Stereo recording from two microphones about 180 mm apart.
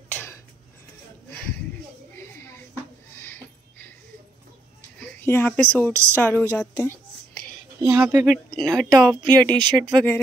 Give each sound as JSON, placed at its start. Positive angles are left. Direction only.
{"t": 0.1, "sound": "a sound", "side_deg": 10}
{"t": 2.4, "sound": "a sound", "side_deg": 15}
{"t": 4.9, "sound": "speech", "side_deg": 10}
{"t": 6.5, "sound": "whispering", "side_deg": 10}
{"t": 7.8, "sound": "speech", "side_deg": -10}
{"t": 8.3, "sound": "speech", "side_deg": 5}
{"t": 8.9, "sound": "speech", "side_deg": -20}
{"t": 9.9, "sound": "speech", "side_deg": 10}